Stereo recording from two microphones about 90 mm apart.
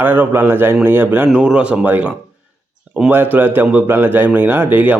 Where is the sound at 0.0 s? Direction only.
20° right (ahead or behind).